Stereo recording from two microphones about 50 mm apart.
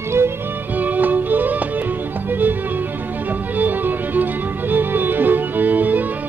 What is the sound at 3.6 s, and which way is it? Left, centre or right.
Music, right.